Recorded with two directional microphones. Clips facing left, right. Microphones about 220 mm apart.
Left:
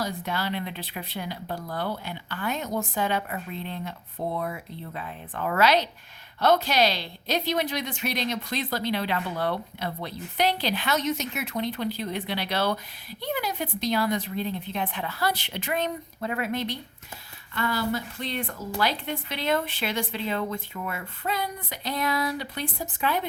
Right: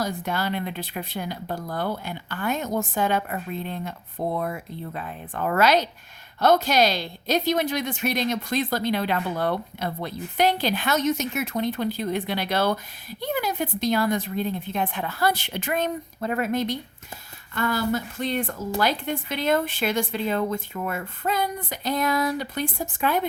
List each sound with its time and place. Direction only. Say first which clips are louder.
0.0 s a woman's voice: right 3 dB; 45° right (ahead or behind)